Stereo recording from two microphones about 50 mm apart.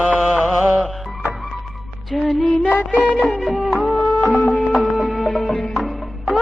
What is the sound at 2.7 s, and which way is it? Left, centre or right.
Music, left.